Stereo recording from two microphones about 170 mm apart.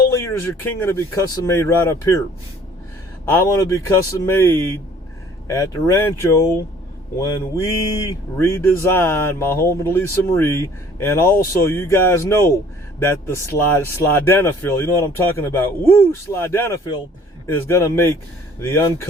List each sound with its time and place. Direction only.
0.1 s speech: 15° left (ahead or behind)
3.2 s speech: 15° left (ahead or behind)
7.2 s mantra: 20° left (ahead or behind)
8.4 s speech: 15° left (ahead or behind)